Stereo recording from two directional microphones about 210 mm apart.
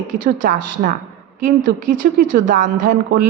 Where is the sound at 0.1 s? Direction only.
40° right (ahead or behind).